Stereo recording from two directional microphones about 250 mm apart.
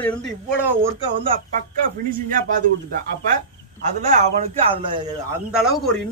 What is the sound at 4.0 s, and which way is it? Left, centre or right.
Speech, right.